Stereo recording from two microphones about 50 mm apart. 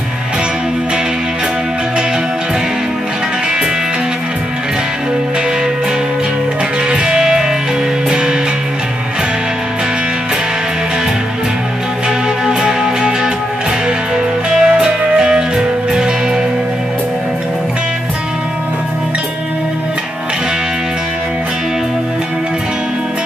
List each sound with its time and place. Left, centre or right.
6.9 s music: centre
12.4 s music: centre